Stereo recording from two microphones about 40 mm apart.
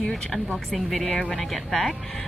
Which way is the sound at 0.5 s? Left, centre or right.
Centre.